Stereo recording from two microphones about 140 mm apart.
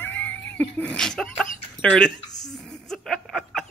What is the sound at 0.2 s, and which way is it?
Speech, 15° left (ahead or behind).